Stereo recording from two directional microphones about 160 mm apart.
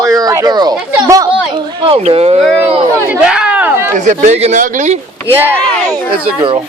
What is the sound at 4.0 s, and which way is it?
Speech, 45° right (ahead or behind).